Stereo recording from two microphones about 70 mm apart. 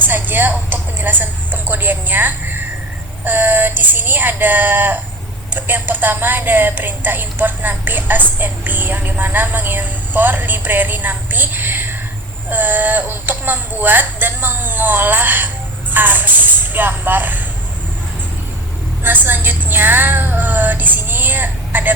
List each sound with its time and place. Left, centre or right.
0.0 s a sound: right
5.5 s a woman's voice: right
19.0 s a woman's voice: right